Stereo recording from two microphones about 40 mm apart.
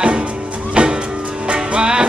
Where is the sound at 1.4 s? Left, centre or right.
Right.